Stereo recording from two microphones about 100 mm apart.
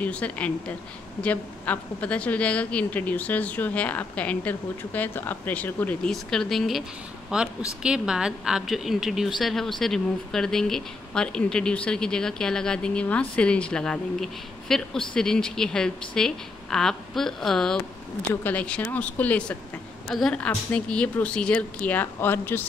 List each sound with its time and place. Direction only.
0.0 s speech: 15° left (ahead or behind)
7.3 s speech: 10° right (ahead or behind)
18.3 s speech: 15° left (ahead or behind)
20.1 s a woman's voice: 5° left (ahead or behind); by 22.7 s 20° left (ahead or behind)